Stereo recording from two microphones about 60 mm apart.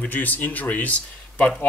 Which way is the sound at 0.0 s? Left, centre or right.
Left.